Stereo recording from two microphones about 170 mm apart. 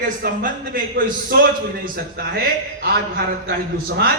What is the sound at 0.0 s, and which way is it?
A man's voice, 60° right (ahead or behind).